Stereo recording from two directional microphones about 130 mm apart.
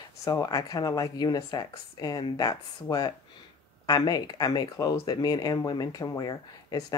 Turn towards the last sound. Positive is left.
turn(degrees=30)  # may be behind; listen again after turning